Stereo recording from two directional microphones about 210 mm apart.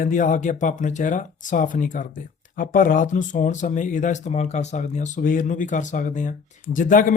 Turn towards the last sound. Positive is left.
turn(degrees=40)  # may be behind; listen again after turning